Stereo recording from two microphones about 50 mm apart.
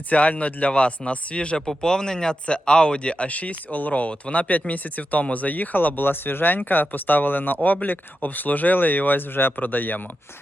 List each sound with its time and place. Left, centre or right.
0.1 s speech: left